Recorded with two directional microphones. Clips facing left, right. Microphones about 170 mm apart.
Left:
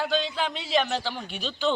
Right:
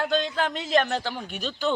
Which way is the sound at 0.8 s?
10° right (ahead or behind).